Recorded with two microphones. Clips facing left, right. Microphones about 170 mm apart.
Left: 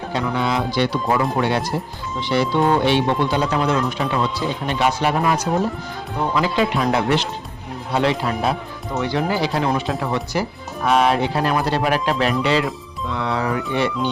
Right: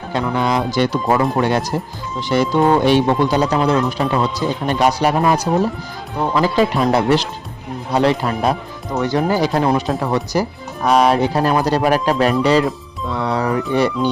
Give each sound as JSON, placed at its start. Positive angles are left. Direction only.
{"t": 0.1, "sound": "speech", "side_deg": -45}